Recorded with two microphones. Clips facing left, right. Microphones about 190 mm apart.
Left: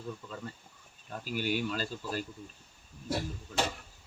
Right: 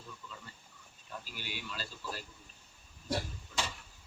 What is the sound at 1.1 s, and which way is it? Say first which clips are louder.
Speech: left 12 dB; 50° left (ahead or behind).